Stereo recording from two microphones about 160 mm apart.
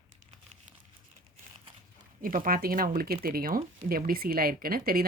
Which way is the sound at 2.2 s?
60° right (ahead or behind).